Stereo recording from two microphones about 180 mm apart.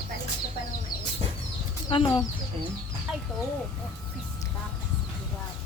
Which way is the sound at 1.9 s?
30° left (ahead or behind).